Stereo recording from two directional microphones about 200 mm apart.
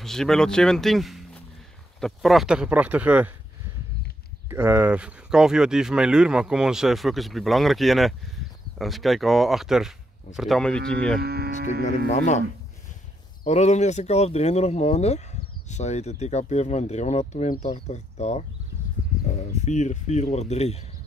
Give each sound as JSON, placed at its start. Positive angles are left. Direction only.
{"t": 0.0, "sound": "speech", "side_deg": 0}
{"t": 4.5, "sound": "speech", "side_deg": -10}
{"t": 11.1, "sound": "speech", "side_deg": -50}
{"t": 12.1, "sound": "speech", "side_deg": 35}